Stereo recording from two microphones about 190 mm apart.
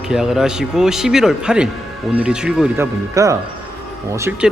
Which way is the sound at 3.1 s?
15° right (ahead or behind).